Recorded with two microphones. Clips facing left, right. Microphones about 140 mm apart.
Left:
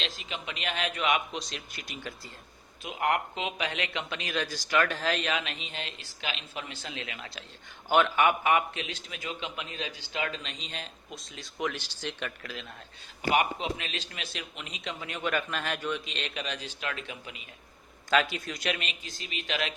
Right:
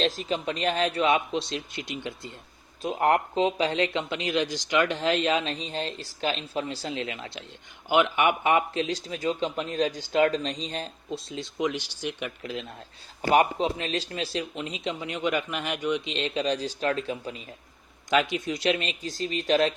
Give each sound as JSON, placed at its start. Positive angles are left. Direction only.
{"t": 0.0, "sound": "a man's voice", "side_deg": -40}
{"t": 2.8, "sound": "a man's voice", "side_deg": -40}
{"t": 18.1, "sound": "a man's voice", "side_deg": -20}